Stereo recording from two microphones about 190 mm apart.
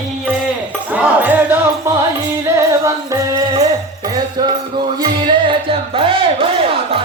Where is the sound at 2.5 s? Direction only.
15° right (ahead or behind).